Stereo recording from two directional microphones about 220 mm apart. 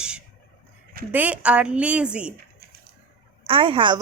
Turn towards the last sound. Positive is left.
turn(degrees=-25)  # may be behind; listen again after turning